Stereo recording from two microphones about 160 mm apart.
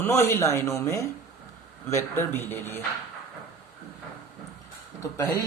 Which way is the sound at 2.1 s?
15° left (ahead or behind).